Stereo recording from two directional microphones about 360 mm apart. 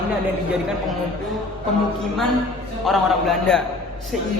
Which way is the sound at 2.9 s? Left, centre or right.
Centre.